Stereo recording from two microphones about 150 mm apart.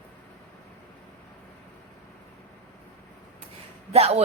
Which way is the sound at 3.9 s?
45° right (ahead or behind).